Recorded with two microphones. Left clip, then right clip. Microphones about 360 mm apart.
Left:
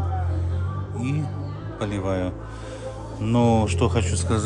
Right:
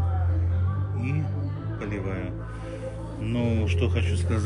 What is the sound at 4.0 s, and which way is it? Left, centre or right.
Speech, left.